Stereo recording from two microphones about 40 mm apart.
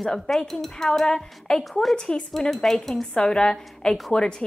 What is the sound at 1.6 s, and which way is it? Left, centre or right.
Speech, centre.